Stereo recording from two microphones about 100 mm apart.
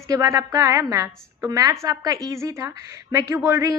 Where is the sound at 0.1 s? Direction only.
35° right (ahead or behind).